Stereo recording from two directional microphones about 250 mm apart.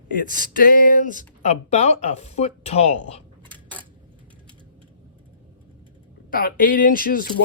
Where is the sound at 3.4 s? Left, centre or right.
Centre.